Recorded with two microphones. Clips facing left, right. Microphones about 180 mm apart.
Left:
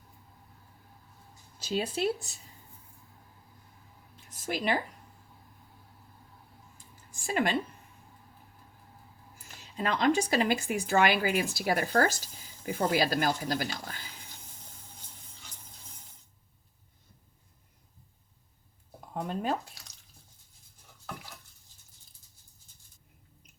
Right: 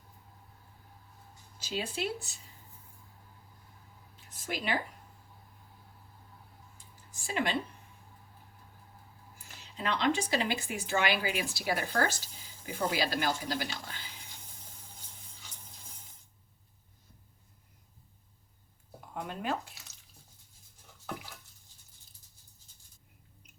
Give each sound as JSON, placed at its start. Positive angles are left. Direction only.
{"t": 1.6, "sound": "speech", "side_deg": 40}
{"t": 4.4, "sound": "speech", "side_deg": 45}
{"t": 7.3, "sound": "speech", "side_deg": 45}
{"t": 9.7, "sound": "speech", "side_deg": 45}
{"t": 19.1, "sound": "speech", "side_deg": 40}